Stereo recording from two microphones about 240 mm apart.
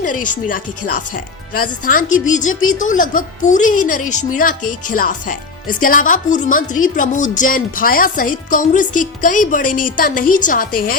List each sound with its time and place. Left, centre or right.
0.0 s speech: left
2.5 s speech: left
2.7 s speech: left